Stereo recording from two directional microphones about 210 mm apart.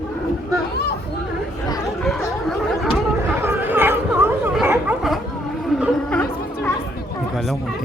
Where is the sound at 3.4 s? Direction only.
10° right (ahead or behind).